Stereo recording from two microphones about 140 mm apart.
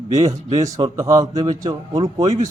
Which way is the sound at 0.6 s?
25° right (ahead or behind).